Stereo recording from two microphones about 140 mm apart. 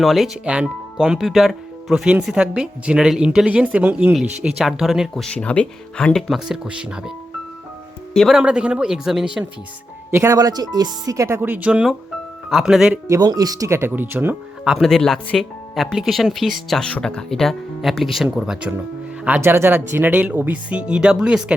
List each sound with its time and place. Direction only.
0.0 s speech: centre (ahead or behind)
8.1 s speech: centre (ahead or behind)
10.1 s speech: 20° right (ahead or behind)
13.1 s speech: 25° right (ahead or behind)
14.7 s speech: centre (ahead or behind)